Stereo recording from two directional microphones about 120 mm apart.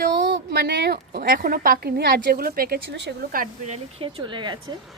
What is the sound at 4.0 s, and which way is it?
Speech, 45° right (ahead or behind).